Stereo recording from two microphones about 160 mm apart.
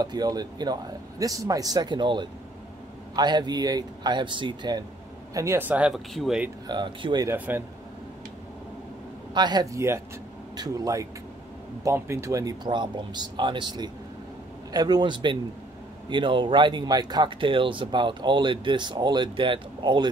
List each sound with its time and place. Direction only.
0.0 s speech: 25° right (ahead or behind); by 6.5 s 5° right (ahead or behind)
6.7 s speech: 30° right (ahead or behind)
7.2 s speech: 10° right (ahead or behind)
9.3 s speech: 25° right (ahead or behind)